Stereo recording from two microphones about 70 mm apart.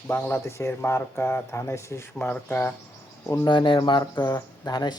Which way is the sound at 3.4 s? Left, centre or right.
Left.